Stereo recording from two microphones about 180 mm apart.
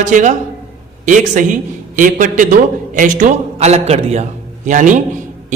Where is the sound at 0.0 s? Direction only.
45° right (ahead or behind).